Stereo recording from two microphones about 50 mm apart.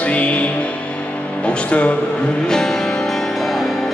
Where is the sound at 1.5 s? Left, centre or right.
Left.